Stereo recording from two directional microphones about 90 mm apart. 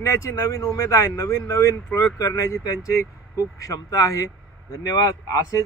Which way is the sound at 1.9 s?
20° left (ahead or behind).